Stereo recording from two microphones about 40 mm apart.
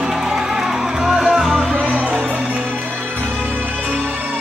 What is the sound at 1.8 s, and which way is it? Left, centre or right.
Music, right.